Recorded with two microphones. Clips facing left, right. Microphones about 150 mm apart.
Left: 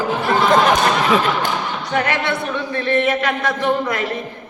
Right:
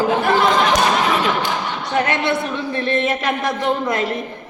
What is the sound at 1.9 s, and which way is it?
A woman's voice, 25° right (ahead or behind).